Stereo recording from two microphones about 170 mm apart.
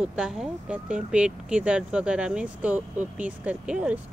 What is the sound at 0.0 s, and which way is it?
Speech, 5° right (ahead or behind).